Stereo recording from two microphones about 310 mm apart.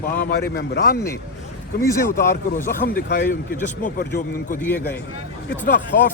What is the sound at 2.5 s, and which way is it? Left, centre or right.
Speech, left.